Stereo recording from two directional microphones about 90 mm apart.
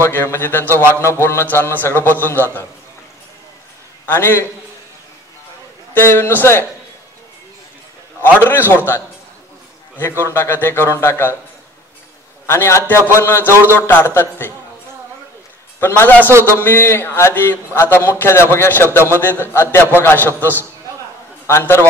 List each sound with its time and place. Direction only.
0.0 s a man's voice: 25° left (ahead or behind)
4.1 s a man's voice: 25° left (ahead or behind)
5.9 s a man's voice: 25° left (ahead or behind)
8.2 s a man's voice: 20° left (ahead or behind)
9.9 s a man's voice: 25° left (ahead or behind)
12.4 s a man's voice: 30° left (ahead or behind)
15.8 s a man's voice: 20° left (ahead or behind)